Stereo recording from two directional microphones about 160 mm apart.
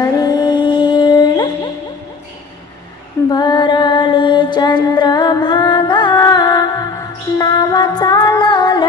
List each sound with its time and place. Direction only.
0.0 s music: 25° left (ahead or behind)
3.3 s mantra: 25° left (ahead or behind)